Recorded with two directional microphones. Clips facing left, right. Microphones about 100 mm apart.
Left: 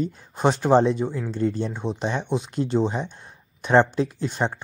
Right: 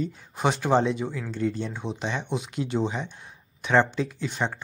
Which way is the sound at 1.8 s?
35° left (ahead or behind).